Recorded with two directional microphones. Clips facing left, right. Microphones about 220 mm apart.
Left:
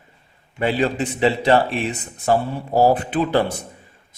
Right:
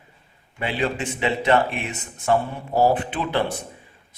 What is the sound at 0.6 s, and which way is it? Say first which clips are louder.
A man's voice: left 5 dB; 40° left (ahead or behind).